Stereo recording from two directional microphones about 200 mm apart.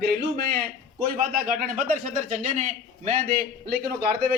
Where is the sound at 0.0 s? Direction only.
50° right (ahead or behind); by 3.2 s 35° right (ahead or behind).